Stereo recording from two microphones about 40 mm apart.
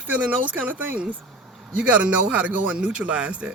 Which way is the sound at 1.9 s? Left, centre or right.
Right.